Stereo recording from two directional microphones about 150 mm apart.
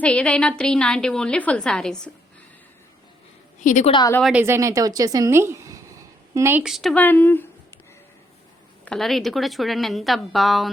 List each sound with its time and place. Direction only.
0.0 s a woman's voice: 5° left (ahead or behind)
3.6 s a woman's voice: 55° left (ahead or behind)
4.2 s speech: 10° right (ahead or behind)
6.6 s a woman's voice: centre (ahead or behind)
6.9 s speech: 10° left (ahead or behind)
8.8 s a woman's voice: 5° left (ahead or behind)